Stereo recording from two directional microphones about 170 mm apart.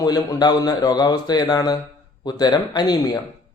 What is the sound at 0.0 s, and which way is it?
A man's voice, 25° left (ahead or behind).